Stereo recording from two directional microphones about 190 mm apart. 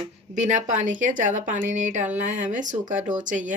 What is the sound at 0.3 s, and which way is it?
Speech, 40° right (ahead or behind).